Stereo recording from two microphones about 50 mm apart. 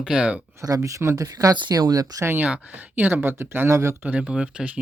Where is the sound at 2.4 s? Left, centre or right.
Right.